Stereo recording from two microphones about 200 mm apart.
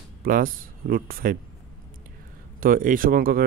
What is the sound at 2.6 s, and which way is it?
Speech, 45° right (ahead or behind).